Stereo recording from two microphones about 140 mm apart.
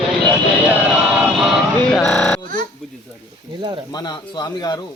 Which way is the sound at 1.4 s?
Centre (ahead or behind).